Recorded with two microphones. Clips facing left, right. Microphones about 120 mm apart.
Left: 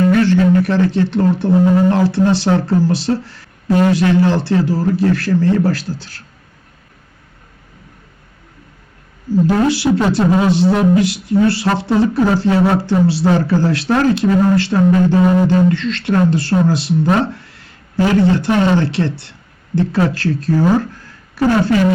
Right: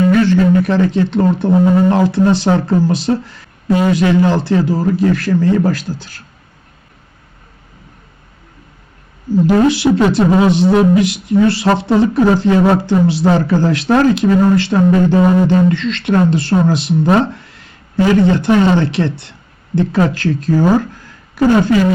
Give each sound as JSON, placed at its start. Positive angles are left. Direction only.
{"t": 0.3, "sound": "a man's voice", "side_deg": -20}
{"t": 9.6, "sound": "speech", "side_deg": -20}
{"t": 18.3, "sound": "speech", "side_deg": -20}